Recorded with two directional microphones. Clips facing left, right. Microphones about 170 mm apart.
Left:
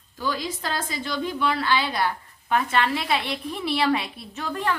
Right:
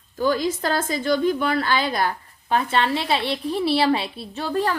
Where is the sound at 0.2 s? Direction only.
50° right (ahead or behind).